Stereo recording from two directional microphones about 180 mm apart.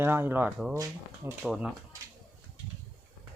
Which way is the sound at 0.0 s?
10° right (ahead or behind).